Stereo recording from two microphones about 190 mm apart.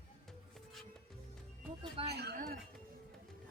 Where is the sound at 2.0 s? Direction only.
60° right (ahead or behind).